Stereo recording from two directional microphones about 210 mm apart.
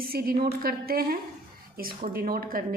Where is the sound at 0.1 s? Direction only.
45° right (ahead or behind).